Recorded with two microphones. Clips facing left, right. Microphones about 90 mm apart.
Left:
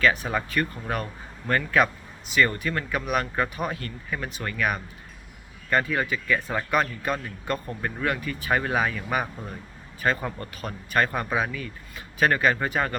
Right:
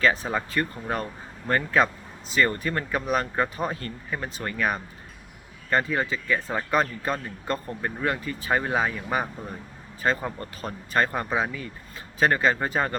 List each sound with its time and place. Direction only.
0.0 s speech: 30° right (ahead or behind)
7.7 s speech: 15° right (ahead or behind)